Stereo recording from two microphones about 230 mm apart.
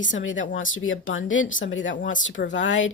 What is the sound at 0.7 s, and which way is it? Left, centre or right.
Speech, left.